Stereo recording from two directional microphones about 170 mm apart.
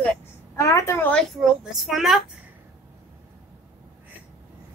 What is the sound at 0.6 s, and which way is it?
Speech, 20° left (ahead or behind).